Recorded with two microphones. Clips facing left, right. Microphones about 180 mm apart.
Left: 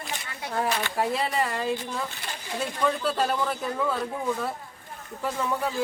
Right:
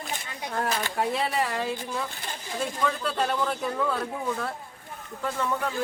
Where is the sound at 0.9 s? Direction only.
Centre (ahead or behind).